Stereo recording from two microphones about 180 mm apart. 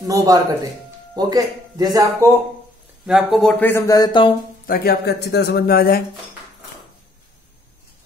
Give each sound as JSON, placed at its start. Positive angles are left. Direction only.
{"t": 0.0, "sound": "speech", "side_deg": -20}
{"t": 3.1, "sound": "speech", "side_deg": 0}
{"t": 4.6, "sound": "a man's voice", "side_deg": 55}